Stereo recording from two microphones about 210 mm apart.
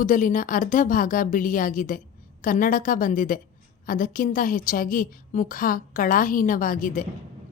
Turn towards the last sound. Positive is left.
turn(degrees=40)  # may be behind; listen again after turning